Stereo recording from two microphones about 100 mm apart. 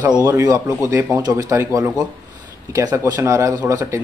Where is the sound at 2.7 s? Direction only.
35° right (ahead or behind).